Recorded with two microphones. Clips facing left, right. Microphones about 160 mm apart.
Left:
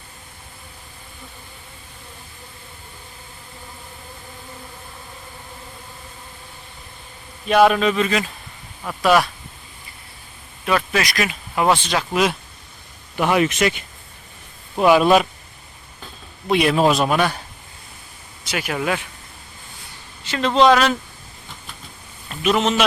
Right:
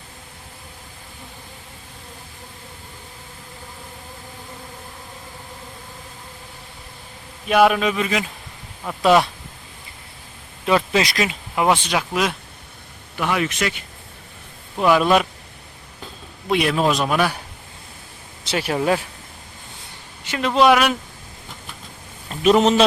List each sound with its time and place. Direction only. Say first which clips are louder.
7.4 s speech: left 1 dB; 5° right (ahead or behind); by 9.3 s 25° right (ahead or behind)
10.7 s speech: right 2 dB; 25° right (ahead or behind)
11.6 s speech: even; 10° right (ahead or behind)
13.3 s speech: left 5 dB; 20° left (ahead or behind)
14.8 s a man's voice: left 2 dB; 5° left (ahead or behind)
16.5 s a man's voice: left 2 dB; centre (ahead or behind)
18.4 s speech: right 3 dB; 30° right (ahead or behind)
20.2 s speech: left 1 dB; 10° right (ahead or behind)
22.3 s speech: right 4 dB; 35° right (ahead or behind)